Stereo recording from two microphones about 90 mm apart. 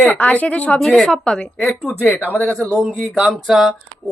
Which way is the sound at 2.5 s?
Centre (ahead or behind).